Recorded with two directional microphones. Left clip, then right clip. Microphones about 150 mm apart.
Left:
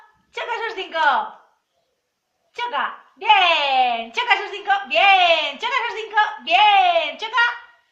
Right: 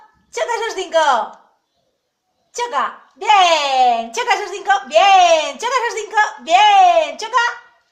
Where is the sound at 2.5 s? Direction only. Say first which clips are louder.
Right 4 dB; 55° right (ahead or behind).